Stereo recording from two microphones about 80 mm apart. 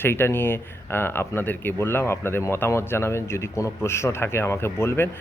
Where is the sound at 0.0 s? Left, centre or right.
Left.